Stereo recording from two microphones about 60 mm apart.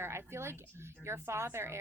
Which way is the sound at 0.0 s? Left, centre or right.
Right.